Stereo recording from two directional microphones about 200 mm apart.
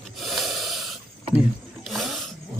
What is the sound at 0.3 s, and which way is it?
Snort, centre (ahead or behind).